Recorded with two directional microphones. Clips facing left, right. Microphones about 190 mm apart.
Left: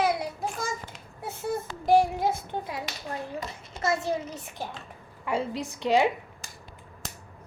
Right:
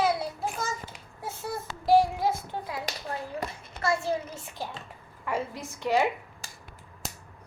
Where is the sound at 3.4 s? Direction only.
55° right (ahead or behind).